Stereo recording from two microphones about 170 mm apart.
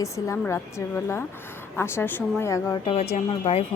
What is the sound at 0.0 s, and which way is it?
Speech, 15° left (ahead or behind).